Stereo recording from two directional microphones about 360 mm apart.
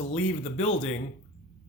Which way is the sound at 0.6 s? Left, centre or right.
Centre.